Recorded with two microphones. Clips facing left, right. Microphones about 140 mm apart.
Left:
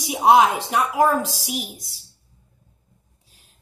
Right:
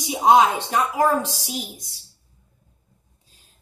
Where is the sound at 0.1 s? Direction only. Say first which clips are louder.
Left 1 dB; 5° left (ahead or behind).